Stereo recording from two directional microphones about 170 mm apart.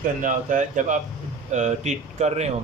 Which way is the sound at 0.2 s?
50° right (ahead or behind).